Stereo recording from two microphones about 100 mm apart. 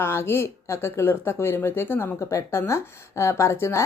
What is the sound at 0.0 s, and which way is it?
Speech, 25° left (ahead or behind).